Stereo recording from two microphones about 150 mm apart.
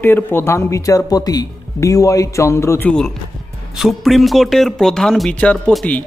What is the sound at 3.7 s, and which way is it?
A man's voice, centre (ahead or behind).